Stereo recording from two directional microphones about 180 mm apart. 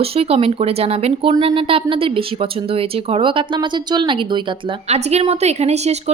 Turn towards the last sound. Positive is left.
turn(degrees=-35)  # may be behind; listen again after turning